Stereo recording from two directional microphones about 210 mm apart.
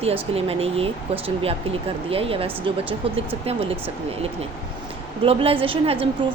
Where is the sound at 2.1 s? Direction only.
25° right (ahead or behind).